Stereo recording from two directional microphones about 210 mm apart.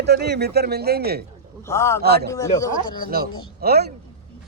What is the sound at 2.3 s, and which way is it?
Speech, 15° left (ahead or behind).